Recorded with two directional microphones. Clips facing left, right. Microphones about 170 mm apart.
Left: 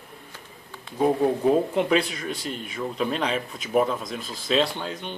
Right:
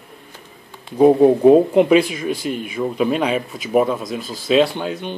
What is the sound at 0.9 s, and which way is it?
Speech, 20° right (ahead or behind).